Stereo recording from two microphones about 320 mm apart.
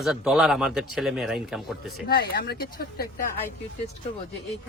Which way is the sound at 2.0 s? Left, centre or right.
Left.